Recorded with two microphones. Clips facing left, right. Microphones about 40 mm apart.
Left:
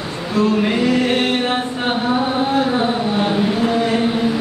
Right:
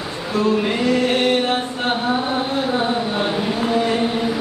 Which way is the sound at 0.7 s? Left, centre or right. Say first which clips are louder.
Left 2 dB; centre.